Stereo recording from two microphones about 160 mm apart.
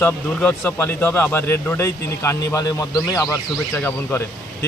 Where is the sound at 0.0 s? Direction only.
10° left (ahead or behind).